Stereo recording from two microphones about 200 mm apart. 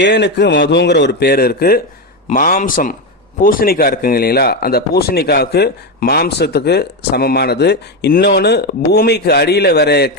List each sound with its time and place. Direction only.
0.0 s a man's voice: 60° left (ahead or behind)